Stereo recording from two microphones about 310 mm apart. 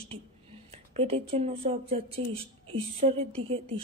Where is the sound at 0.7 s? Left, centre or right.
Centre.